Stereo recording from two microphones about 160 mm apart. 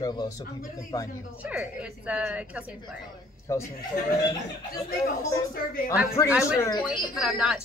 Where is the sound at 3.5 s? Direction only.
20° left (ahead or behind).